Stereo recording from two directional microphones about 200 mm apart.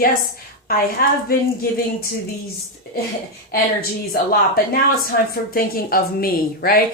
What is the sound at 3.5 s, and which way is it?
A woman's voice, 50° left (ahead or behind).